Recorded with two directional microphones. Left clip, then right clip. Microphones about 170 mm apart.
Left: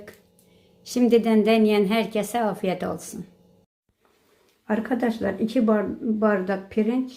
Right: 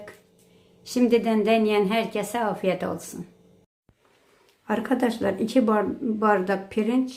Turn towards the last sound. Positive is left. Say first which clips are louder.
# even
turn(degrees=0)  # may be behind; listen again after turning